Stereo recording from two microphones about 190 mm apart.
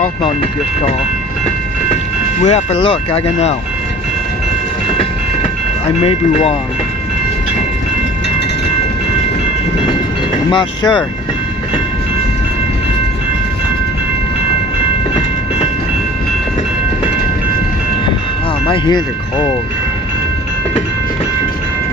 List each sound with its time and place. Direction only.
2.4 s speech: 35° left (ahead or behind)
10.5 s speech: 25° left (ahead or behind)
18.6 s speech: 25° left (ahead or behind)